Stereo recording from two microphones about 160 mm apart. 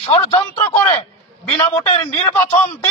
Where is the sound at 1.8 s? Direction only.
35° left (ahead or behind).